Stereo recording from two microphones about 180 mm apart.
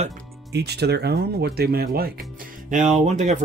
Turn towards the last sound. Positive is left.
turn(degrees=-40)  # may be behind; listen again after turning